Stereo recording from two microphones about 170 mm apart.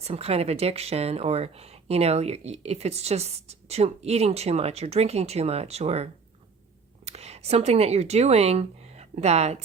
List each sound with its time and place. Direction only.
0.0 s speech: 35° right (ahead or behind)